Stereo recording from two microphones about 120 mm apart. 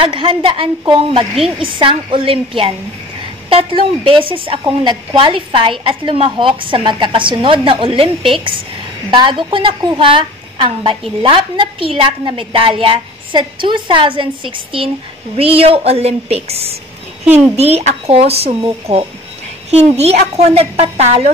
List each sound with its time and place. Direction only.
0.0 s a woman's voice: 45° right (ahead or behind); by 21.3 s 65° right (ahead or behind)